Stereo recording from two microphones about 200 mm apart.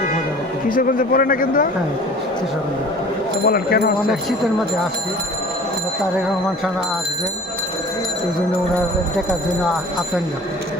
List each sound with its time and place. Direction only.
0.7 s a man's voice: 45° left (ahead or behind)
3.4 s a man's voice: 50° left (ahead or behind)